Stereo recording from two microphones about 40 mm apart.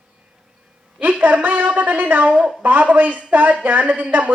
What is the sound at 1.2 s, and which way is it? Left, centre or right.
Speech, right.